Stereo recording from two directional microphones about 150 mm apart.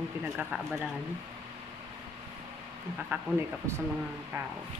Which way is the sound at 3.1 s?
15° right (ahead or behind).